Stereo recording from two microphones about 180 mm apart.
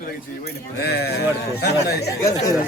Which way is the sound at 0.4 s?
65° left (ahead or behind).